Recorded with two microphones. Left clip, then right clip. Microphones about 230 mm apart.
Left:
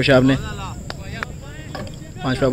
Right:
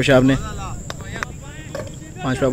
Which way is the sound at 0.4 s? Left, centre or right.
Left.